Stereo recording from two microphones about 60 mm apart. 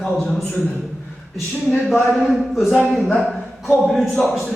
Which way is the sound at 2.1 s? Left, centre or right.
Centre.